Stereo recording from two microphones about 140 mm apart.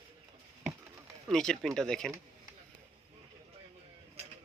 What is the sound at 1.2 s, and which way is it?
Speech, 5° left (ahead or behind).